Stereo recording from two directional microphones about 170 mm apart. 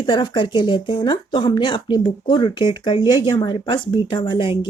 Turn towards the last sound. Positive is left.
turn(degrees=30)  # may be behind; listen again after turning